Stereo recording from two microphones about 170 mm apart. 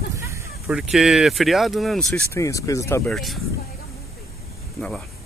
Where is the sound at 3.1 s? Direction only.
Centre (ahead or behind).